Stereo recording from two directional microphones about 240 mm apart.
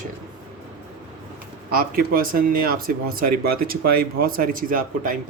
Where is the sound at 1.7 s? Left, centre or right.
Right.